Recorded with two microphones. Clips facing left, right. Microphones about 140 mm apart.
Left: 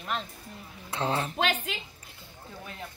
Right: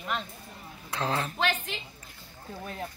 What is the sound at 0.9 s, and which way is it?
Speech, 25° left (ahead or behind).